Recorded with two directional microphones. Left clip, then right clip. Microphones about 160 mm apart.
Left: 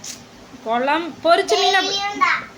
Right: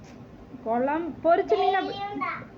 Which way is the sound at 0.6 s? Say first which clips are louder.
Left 7 dB; 30° left (ahead or behind).